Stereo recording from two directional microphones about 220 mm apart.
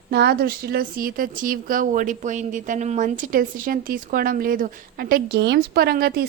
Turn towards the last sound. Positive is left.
turn(degrees=-40)  # may be behind; listen again after turning